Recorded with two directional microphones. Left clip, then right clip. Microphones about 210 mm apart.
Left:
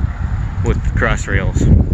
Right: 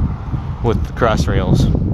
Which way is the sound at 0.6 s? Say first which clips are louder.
Right 2 dB; 25° right (ahead or behind).